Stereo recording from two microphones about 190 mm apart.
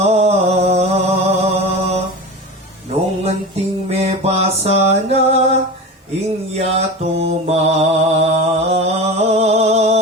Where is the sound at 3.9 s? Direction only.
35° right (ahead or behind).